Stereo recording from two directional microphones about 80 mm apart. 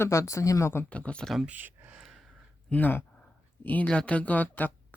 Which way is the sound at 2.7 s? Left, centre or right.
Left.